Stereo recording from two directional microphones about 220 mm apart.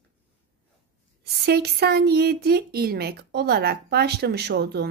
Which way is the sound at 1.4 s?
45° right (ahead or behind).